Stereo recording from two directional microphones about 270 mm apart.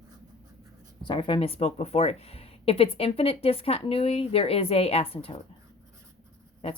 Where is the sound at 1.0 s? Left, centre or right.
Centre.